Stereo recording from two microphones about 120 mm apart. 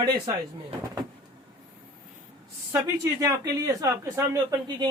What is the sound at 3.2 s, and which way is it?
A man's voice, 25° right (ahead or behind).